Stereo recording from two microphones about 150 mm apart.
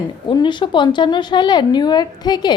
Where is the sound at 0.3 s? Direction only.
30° left (ahead or behind).